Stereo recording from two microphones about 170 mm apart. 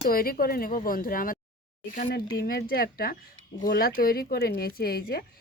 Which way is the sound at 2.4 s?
65° left (ahead or behind).